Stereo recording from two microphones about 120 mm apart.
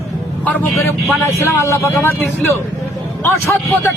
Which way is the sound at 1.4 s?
25° left (ahead or behind).